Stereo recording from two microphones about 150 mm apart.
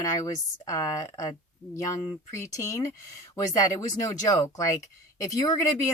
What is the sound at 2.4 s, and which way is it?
Speech, 20° left (ahead or behind).